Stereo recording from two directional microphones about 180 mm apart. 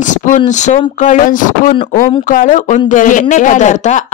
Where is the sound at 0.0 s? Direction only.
45° left (ahead or behind).